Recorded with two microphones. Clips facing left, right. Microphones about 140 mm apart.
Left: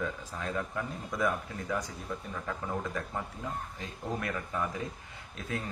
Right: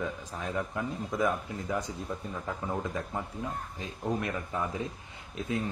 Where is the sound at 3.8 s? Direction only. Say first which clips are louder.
Right 4 dB; 20° right (ahead or behind).